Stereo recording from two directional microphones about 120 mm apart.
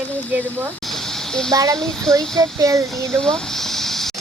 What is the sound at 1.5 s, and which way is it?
Speech, 30° right (ahead or behind).